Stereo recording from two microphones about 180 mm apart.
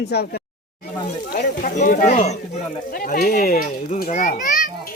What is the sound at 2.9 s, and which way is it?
A child's voice, 55° left (ahead or behind).